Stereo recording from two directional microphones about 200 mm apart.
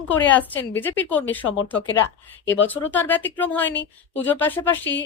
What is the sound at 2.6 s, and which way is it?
Speech, 10° left (ahead or behind).